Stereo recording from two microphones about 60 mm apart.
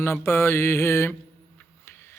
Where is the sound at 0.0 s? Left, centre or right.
Left.